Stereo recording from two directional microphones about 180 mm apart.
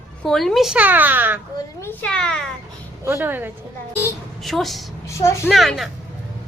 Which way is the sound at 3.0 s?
10° right (ahead or behind).